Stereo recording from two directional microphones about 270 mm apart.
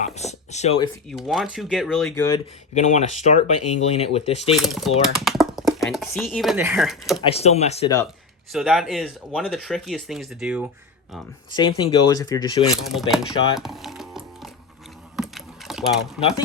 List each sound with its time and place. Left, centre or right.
0.0 s speech: left
1.1 s speech: centre
2.7 s speech: left
4.5 s speech: centre
7.3 s speech: left
8.5 s speech: centre
11.5 s speech: centre
12.9 s music: centre
15.1 s typing: centre